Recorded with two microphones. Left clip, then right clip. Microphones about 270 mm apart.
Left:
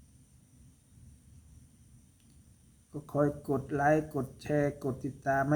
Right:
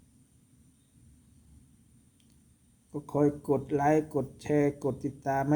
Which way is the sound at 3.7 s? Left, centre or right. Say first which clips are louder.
Even; centre.